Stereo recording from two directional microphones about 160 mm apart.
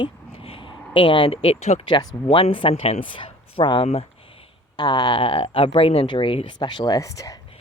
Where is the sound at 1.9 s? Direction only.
30° left (ahead or behind).